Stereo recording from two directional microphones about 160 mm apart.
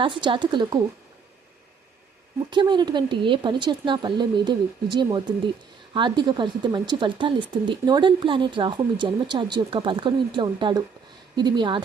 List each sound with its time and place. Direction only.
0.0 s speech: 30° right (ahead or behind)
2.5 s speech: 30° right (ahead or behind)